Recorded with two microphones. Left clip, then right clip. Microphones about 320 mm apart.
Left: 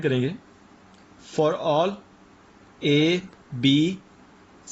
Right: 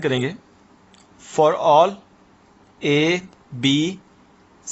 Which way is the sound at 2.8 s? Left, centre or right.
Centre.